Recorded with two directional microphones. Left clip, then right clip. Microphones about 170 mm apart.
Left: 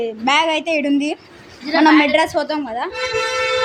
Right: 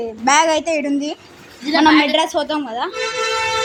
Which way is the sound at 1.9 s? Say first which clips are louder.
Left 1 dB; 10° right (ahead or behind).